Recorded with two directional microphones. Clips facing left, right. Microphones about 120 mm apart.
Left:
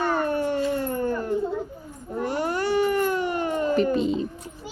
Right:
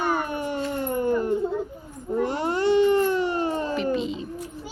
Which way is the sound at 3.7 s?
40° left (ahead or behind).